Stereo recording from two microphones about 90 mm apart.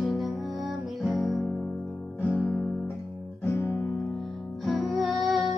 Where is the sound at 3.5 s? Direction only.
30° left (ahead or behind).